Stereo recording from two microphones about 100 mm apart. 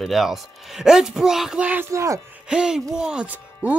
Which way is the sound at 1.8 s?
30° right (ahead or behind).